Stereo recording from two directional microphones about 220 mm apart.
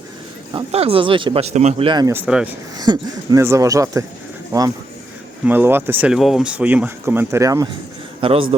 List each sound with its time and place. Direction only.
0.5 s speech: 25° right (ahead or behind); by 2.5 s 5° right (ahead or behind)
2.7 s speech: 20° right (ahead or behind)
5.5 s speech: 10° right (ahead or behind)